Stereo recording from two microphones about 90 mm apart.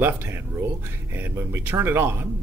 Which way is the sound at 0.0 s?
25° right (ahead or behind).